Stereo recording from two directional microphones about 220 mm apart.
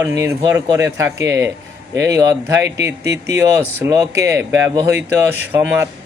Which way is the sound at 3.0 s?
50° right (ahead or behind).